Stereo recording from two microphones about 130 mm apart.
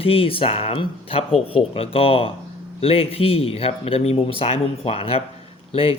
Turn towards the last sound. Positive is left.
turn(degrees=50)  # may be behind; listen again after turning